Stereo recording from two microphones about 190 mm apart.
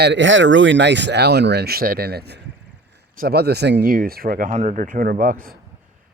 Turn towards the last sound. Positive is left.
turn(degrees=-50)  # may be behind; listen again after turning